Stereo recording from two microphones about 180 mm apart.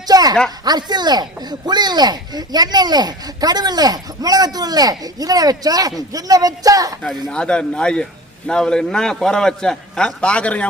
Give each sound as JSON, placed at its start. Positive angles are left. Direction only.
{"t": 0.1, "sound": "a sound", "side_deg": -20}
{"t": 0.6, "sound": "speech", "side_deg": -25}
{"t": 7.3, "sound": "a man's voice", "side_deg": 5}